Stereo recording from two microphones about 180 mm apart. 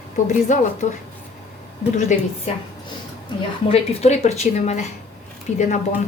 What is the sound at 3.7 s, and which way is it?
Speech, 35° left (ahead or behind).